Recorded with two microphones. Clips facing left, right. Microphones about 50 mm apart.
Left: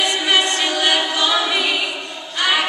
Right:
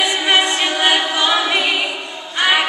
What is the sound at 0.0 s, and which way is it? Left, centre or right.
A capella, centre.